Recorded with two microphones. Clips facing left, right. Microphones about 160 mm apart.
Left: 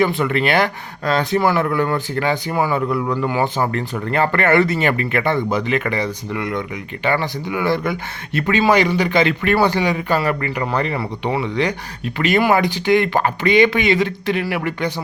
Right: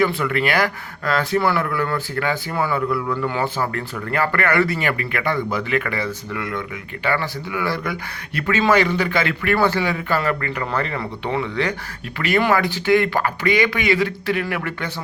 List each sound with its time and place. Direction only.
0.0 s speech: 20° left (ahead or behind)